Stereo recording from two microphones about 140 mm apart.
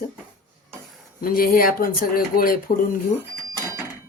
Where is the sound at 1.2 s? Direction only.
90° left.